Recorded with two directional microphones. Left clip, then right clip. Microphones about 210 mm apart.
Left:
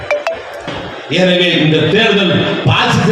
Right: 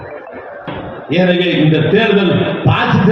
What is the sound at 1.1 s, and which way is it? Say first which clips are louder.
Speech: left 2 dB; 25° right (ahead or behind).